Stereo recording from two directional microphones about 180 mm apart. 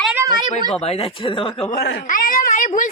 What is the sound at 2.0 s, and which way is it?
Speech, 50° left (ahead or behind).